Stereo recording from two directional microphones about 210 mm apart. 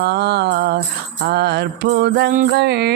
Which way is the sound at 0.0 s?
55° right (ahead or behind).